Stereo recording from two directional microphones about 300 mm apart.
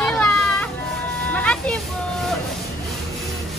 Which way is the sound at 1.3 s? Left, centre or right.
Centre.